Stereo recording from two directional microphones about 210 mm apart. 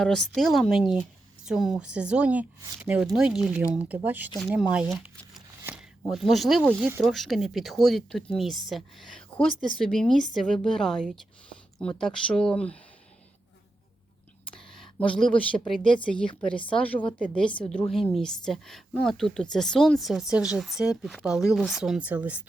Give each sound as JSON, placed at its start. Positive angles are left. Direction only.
{"t": 0.0, "sound": "a woman's voice", "side_deg": 0}
{"t": 6.7, "sound": "speech", "side_deg": -10}
{"t": 7.0, "sound": "a woman's voice", "side_deg": 0}
{"t": 14.5, "sound": "a woman's voice", "side_deg": 5}